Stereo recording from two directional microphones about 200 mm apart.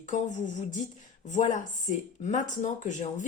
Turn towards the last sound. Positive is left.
turn(degrees=35)  # may be behind; listen again after turning